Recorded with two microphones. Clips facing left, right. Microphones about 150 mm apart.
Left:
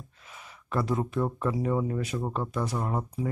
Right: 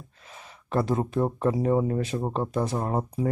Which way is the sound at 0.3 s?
35° right (ahead or behind).